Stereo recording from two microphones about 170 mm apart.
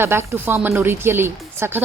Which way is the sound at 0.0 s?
15° right (ahead or behind).